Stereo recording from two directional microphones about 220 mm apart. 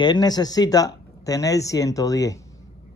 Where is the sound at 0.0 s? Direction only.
20° left (ahead or behind).